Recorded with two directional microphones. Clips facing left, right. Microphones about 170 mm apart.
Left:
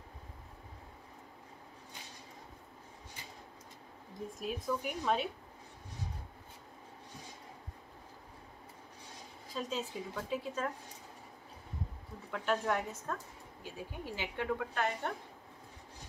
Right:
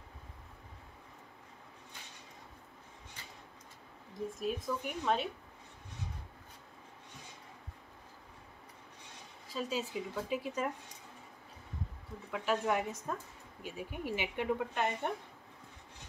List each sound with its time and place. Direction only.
4.4 s speech: centre (ahead or behind)
9.5 s speech: 5° right (ahead or behind)
12.3 s speech: 5° right (ahead or behind)